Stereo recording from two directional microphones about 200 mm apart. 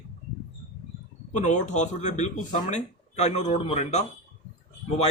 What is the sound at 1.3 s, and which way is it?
Speech, 35° left (ahead or behind).